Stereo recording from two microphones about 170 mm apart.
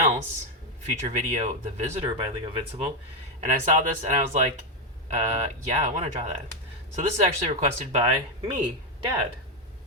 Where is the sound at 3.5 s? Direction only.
50° right (ahead or behind).